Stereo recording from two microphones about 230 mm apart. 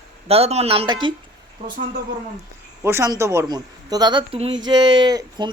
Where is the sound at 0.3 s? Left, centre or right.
Right.